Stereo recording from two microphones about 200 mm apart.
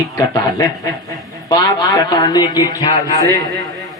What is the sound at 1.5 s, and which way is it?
A man's voice, 20° left (ahead or behind).